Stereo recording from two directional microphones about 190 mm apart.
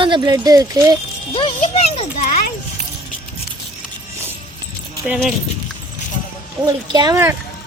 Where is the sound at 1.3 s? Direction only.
30° left (ahead or behind).